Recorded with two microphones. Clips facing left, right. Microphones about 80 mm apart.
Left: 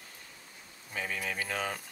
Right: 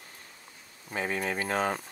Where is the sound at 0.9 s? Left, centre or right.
Right.